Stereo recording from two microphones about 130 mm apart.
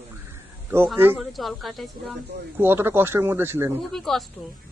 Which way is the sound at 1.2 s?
Centre (ahead or behind).